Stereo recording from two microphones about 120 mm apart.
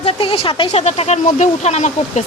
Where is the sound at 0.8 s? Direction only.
80° left.